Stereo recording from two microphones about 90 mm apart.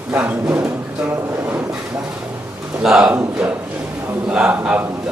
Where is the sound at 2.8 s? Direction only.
5° right (ahead or behind).